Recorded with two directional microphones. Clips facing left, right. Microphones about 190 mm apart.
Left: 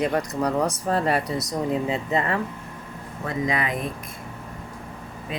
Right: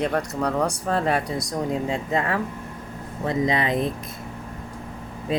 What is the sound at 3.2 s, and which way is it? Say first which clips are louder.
Speech: right 3 dB; 25° right (ahead or behind).